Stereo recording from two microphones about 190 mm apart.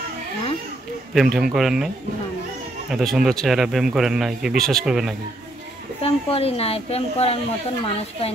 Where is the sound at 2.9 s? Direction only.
Centre (ahead or behind).